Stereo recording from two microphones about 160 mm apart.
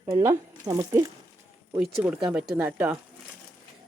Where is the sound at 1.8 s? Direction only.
10° right (ahead or behind).